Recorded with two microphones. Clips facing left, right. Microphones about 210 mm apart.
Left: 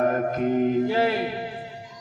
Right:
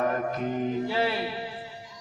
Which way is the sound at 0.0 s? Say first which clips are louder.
Left 5 dB; 50° left (ahead or behind).